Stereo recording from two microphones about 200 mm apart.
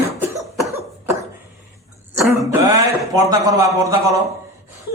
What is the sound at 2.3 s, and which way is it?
Speech, 15° right (ahead or behind).